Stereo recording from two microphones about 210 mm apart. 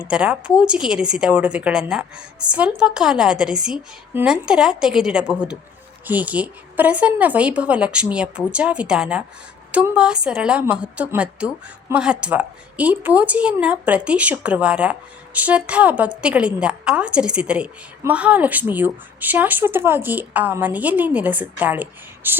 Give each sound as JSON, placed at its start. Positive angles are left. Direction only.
{"t": 0.1, "sound": "a woman's voice", "side_deg": -5}